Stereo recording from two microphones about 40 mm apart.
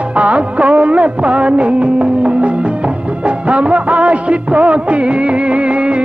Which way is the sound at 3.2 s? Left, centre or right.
Right.